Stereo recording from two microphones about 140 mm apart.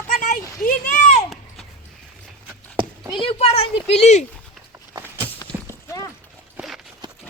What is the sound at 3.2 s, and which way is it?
Speech, 45° left (ahead or behind).